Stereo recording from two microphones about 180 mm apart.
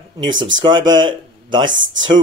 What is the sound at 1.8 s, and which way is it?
Speech, 90° right.